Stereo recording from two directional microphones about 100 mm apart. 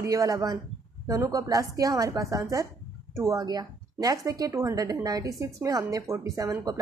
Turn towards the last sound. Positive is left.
turn(degrees=-35)  # may be behind; listen again after turning